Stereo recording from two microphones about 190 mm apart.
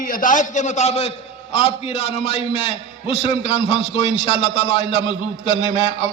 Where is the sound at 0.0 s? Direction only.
45° left (ahead or behind).